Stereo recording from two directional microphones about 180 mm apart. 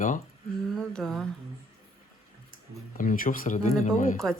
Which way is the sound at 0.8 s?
5° left (ahead or behind).